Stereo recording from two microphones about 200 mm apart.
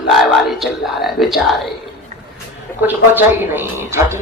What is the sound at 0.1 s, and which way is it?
Speech, centre (ahead or behind).